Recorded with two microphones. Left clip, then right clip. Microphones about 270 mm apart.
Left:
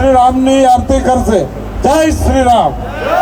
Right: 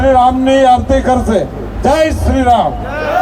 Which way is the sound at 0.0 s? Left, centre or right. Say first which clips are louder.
Left 1 dB; left.